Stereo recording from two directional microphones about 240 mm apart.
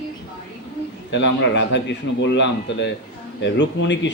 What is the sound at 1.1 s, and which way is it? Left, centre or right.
A man's voice, left.